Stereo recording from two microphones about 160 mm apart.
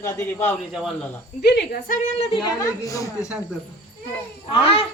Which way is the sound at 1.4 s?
90° left.